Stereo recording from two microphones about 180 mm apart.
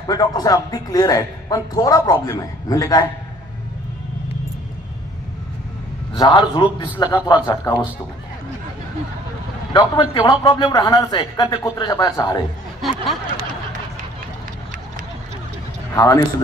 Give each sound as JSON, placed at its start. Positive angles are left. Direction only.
{"t": 0.0, "sound": "speech", "side_deg": 20}
{"t": 6.1, "sound": "speech", "side_deg": 25}
{"t": 9.7, "sound": "speech", "side_deg": 25}
{"t": 15.9, "sound": "speech", "side_deg": 20}